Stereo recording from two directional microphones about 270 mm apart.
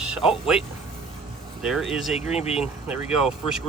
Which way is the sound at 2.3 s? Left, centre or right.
Left.